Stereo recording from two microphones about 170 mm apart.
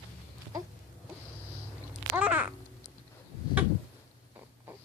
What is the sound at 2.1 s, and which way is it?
Babbling, 10° right (ahead or behind).